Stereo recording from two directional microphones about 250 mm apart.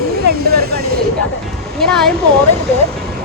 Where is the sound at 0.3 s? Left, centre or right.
Right.